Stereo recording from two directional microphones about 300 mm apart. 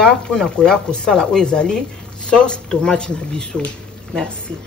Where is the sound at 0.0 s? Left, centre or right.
Centre.